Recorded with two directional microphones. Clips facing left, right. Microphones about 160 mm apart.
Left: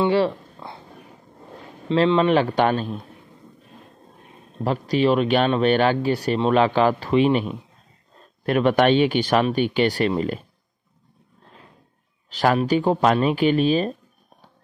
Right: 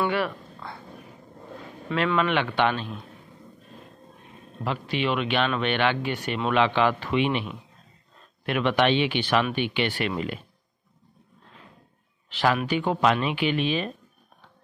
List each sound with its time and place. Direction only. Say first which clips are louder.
0.0 s a sound: left 6 dB; 25° left (ahead or behind)
1.9 s speech: left 7 dB; 25° left (ahead or behind)
4.6 s speech: left 7 dB; 40° left (ahead or behind)
12.3 s speech: left 5 dB; 40° left (ahead or behind)